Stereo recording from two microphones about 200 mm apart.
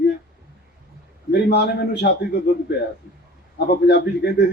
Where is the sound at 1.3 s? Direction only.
55° left (ahead or behind).